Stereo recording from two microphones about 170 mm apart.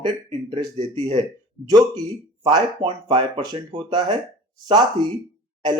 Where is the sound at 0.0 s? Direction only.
35° right (ahead or behind).